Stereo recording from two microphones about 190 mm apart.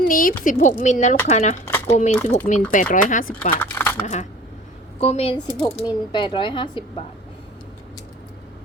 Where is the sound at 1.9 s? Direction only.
35° left (ahead or behind).